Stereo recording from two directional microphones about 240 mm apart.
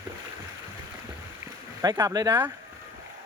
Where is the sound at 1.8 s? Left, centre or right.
Centre.